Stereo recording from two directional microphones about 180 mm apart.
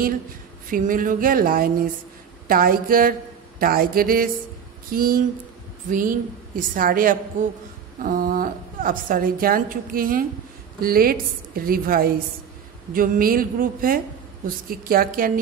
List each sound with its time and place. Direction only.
0.7 s a woman's voice: 50° right (ahead or behind)